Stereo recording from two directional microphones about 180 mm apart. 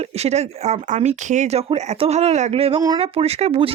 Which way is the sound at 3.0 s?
35° right (ahead or behind).